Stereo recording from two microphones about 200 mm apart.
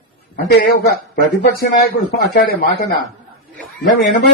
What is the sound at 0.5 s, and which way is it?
Speech, 50° left (ahead or behind).